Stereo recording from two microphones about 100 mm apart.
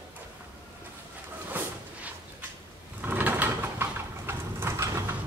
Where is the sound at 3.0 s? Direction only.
20° right (ahead or behind).